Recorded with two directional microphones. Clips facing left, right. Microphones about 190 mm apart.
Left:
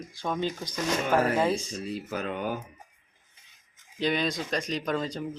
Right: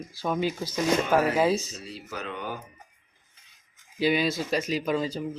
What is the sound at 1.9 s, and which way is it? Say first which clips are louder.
Speech: left 4 dB; 50° left (ahead or behind).